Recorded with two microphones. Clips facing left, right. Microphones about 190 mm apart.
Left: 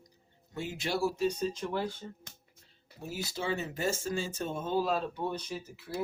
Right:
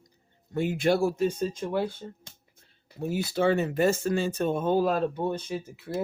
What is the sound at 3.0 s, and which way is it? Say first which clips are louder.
Speech: right 11 dB; 60° right (ahead or behind).